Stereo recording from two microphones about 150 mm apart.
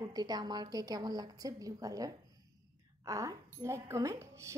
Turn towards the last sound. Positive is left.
turn(degrees=-20)  # may be behind; listen again after turning